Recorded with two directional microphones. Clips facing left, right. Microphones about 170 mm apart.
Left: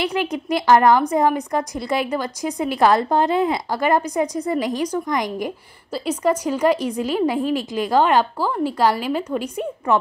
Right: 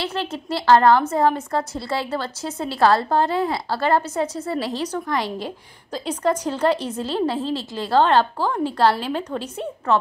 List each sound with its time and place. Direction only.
0.0 s a woman's voice: 15° left (ahead or behind)